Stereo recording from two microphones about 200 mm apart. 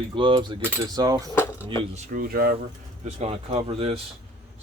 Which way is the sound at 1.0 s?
15° right (ahead or behind).